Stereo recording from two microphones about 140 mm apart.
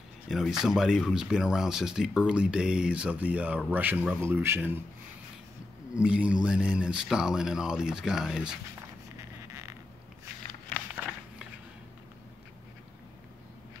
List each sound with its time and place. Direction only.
0.3 s speech: 5° right (ahead or behind)
5.9 s speech: 10° right (ahead or behind)